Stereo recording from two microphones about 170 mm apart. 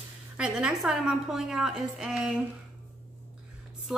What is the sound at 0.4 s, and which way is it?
A woman's voice, 5° right (ahead or behind).